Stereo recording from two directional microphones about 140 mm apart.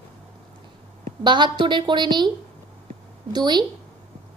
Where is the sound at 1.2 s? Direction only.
35° right (ahead or behind).